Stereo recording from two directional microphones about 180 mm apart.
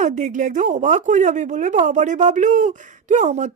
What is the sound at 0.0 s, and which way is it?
Speech, 45° right (ahead or behind).